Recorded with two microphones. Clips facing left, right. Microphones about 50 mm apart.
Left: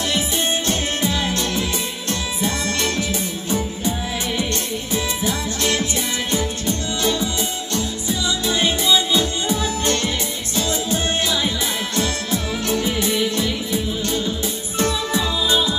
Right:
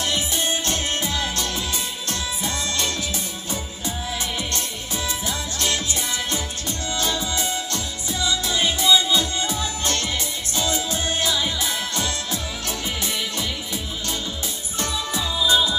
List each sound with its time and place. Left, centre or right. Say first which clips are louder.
0.7 s music: left 3 dB; left
4.9 s music: left 4 dB; left
8.3 s music: left 2 dB; left